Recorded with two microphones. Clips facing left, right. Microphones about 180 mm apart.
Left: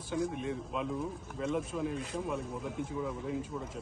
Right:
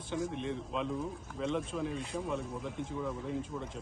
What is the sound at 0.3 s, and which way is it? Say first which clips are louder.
Speech: even; 5° left (ahead or behind).